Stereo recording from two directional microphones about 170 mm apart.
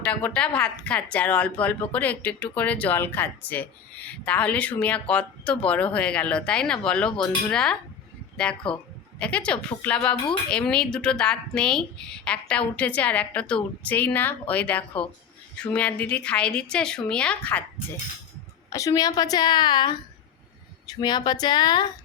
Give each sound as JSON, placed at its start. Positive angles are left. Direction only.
{"t": 0.0, "sound": "a woman's voice", "side_deg": 10}
{"t": 18.7, "sound": "a woman's voice", "side_deg": 20}